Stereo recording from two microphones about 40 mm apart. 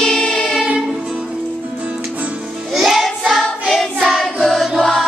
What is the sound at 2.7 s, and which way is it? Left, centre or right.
Child singing, centre.